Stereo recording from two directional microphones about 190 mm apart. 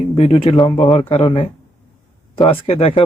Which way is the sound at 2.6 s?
30° left (ahead or behind).